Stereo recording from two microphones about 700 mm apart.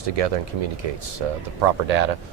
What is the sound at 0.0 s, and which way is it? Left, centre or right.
Speech, right.